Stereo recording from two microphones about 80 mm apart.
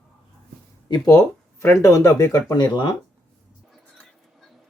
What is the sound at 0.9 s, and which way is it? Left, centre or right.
Speech, left.